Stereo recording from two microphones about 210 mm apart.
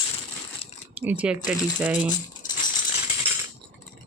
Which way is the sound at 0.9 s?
10° right (ahead or behind).